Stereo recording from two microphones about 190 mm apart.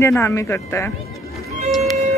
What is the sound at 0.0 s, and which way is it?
Speech, 15° left (ahead or behind).